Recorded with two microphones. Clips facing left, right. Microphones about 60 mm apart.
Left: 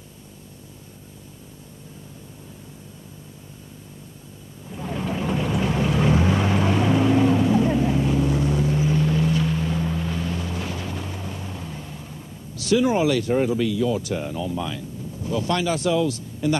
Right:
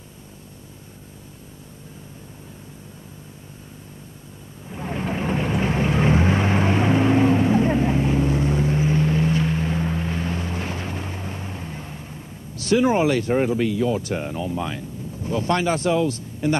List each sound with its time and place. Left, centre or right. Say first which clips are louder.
4.6 s vehicle: right 1 dB; right